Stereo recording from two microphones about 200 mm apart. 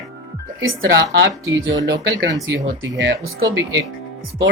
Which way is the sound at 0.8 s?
55° right (ahead or behind).